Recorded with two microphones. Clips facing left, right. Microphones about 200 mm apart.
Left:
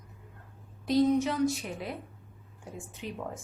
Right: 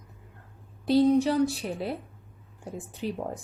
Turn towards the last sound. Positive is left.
turn(degrees=-35)  # may be behind; listen again after turning